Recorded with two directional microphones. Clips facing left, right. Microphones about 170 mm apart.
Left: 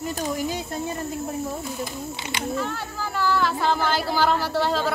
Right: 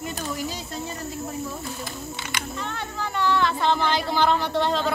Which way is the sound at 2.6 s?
5° left (ahead or behind).